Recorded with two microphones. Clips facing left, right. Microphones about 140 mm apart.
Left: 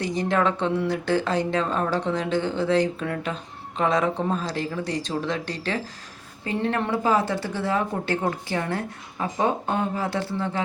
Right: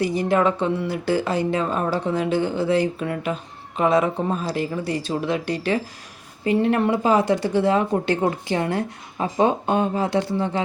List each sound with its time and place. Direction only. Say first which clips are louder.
0.0 s speech: right 4 dB; 10° right (ahead or behind)